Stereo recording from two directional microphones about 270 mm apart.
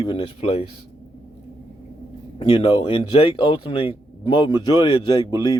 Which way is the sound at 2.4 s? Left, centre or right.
Centre.